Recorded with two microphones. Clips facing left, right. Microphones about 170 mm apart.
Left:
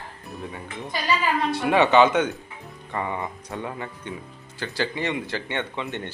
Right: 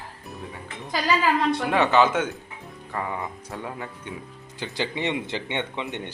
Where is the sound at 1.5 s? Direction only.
Centre (ahead or behind).